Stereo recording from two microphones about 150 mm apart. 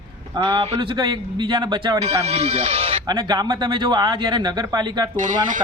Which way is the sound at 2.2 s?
45° right (ahead or behind).